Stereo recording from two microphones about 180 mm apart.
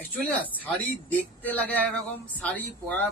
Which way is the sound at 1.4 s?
10° left (ahead or behind).